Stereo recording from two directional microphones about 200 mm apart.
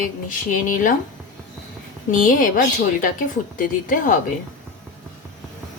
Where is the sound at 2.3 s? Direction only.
45° left (ahead or behind).